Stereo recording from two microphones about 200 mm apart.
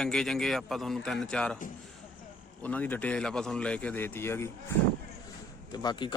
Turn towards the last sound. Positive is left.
turn(degrees=20)  # may be behind; listen again after turning